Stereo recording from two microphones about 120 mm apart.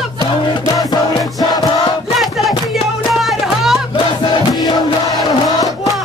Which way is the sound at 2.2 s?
Centre (ahead or behind).